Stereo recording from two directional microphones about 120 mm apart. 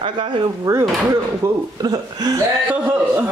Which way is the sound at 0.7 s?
25° right (ahead or behind).